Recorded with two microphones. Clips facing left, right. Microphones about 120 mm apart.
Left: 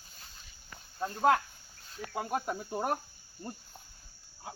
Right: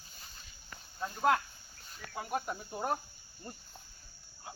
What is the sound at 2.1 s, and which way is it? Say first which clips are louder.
Speech: left 3 dB; 30° left (ahead or behind).